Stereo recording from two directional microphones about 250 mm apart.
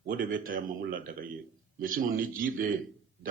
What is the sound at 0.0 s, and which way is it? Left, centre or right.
Speech, right.